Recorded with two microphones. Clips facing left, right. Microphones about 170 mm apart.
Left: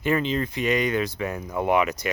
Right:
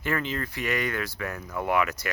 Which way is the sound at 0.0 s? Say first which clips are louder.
Left 6 dB; 20° left (ahead or behind).